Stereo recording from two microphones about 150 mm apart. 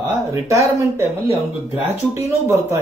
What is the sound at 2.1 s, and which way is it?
Speech, 15° right (ahead or behind).